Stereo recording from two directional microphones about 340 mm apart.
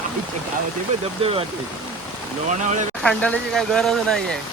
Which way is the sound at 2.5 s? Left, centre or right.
Right.